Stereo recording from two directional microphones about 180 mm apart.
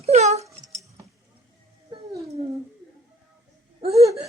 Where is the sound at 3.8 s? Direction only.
35° right (ahead or behind).